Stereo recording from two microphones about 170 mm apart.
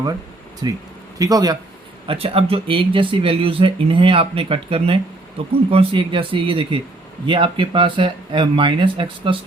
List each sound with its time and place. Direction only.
0.6 s speech: 25° right (ahead or behind)
2.0 s speech: 35° right (ahead or behind)